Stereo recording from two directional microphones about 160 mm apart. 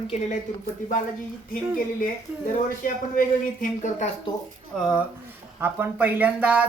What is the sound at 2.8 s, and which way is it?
Speech, 65° left (ahead or behind).